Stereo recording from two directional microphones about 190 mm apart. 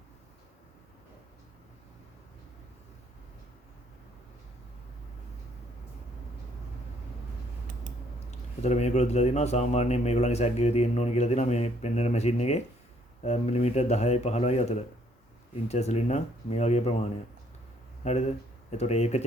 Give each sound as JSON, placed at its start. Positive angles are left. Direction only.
{"t": 8.6, "sound": "speech", "side_deg": 35}